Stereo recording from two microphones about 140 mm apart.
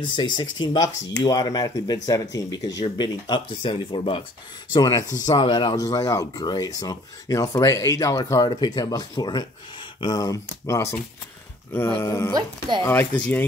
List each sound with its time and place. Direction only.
0.0 s speech: 35° left (ahead or behind)
4.7 s speech: 25° left (ahead or behind)
12.4 s speech: 35° right (ahead or behind)
12.8 s speech: 15° left (ahead or behind)